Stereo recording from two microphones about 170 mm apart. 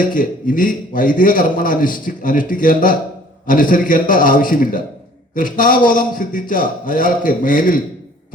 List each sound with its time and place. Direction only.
0.0 s a man's voice: 55° left (ahead or behind)